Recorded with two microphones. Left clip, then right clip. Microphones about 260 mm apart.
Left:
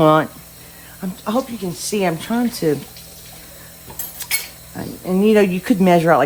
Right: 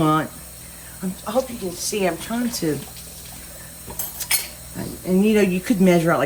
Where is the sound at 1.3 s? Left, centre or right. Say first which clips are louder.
Left 1 dB; left.